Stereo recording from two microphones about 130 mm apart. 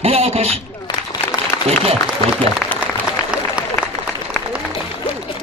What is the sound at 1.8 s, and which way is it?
Speech, 50° right (ahead or behind).